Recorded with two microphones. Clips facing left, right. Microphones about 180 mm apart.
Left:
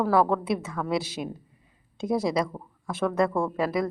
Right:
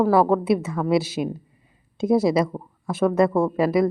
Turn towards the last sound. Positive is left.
turn(degrees=-5)  # may be behind; listen again after turning